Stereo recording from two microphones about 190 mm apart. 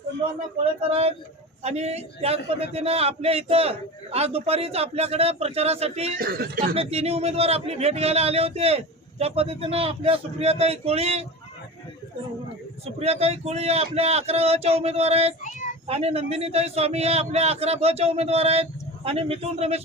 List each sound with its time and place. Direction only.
0.8 s a man's voice: 30° right (ahead or behind)
6.1 s speech: 50° right (ahead or behind)
6.7 s a man's voice: 30° right (ahead or behind)
12.8 s a man's voice: 35° right (ahead or behind)